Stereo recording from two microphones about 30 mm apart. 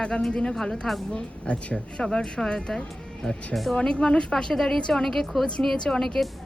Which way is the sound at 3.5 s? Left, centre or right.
Centre.